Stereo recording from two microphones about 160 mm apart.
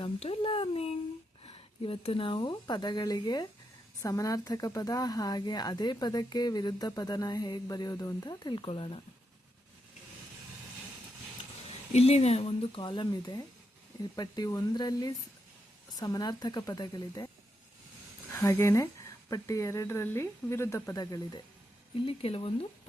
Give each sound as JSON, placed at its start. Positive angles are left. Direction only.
{"t": 0.0, "sound": "speech", "side_deg": 35}
{"t": 11.9, "sound": "speech", "side_deg": 40}
{"t": 18.3, "sound": "speech", "side_deg": 15}
{"t": 21.9, "sound": "speech", "side_deg": 35}